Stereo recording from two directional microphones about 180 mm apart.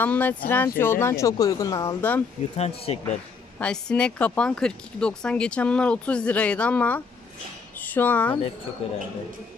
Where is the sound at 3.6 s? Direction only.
5° left (ahead or behind).